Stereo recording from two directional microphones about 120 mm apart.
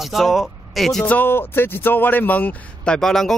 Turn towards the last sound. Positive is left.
turn(degrees=5)  # may be behind; listen again after turning